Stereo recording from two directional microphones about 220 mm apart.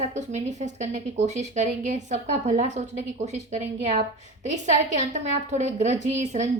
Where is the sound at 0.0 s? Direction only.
30° right (ahead or behind).